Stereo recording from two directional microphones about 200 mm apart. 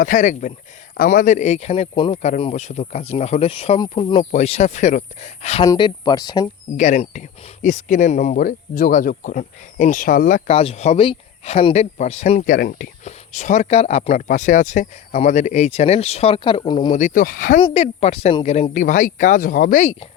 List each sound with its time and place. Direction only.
0.0 s speech: 40° left (ahead or behind)
5.6 s speech: 20° left (ahead or behind)
6.7 s speech: 35° left (ahead or behind)
16.9 s speech: 40° left (ahead or behind)
17.6 s speech: 30° left (ahead or behind)